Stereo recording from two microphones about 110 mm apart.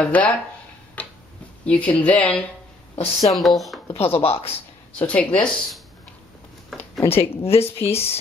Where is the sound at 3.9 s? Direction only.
60° left (ahead or behind).